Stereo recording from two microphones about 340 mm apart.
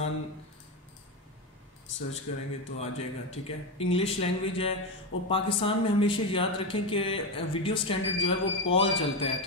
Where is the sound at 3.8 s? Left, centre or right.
Centre.